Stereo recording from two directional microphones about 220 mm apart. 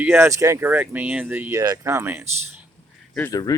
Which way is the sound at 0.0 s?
10° right (ahead or behind).